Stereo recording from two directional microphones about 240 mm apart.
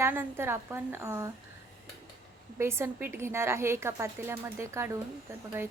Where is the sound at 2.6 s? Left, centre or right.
Centre.